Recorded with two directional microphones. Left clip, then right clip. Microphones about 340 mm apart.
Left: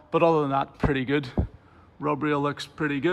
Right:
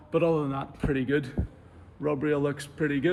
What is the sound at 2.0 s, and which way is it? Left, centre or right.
Speech, left.